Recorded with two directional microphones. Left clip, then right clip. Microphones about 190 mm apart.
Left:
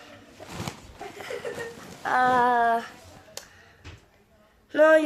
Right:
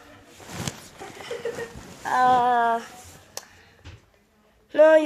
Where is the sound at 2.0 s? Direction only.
10° left (ahead or behind).